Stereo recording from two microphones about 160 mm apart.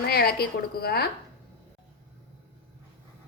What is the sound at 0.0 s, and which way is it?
A woman's voice, 80° left.